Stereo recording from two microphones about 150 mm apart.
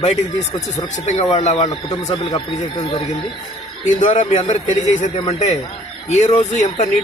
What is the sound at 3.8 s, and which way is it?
Speech, 55° left (ahead or behind).